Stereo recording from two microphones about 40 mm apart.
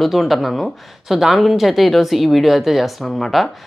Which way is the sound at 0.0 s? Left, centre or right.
Centre.